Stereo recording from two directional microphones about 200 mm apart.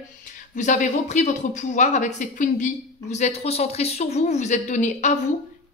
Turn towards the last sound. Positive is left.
turn(degrees=35)  # may be behind; listen again after turning